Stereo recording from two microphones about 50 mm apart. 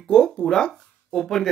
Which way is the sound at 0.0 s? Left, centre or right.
Centre.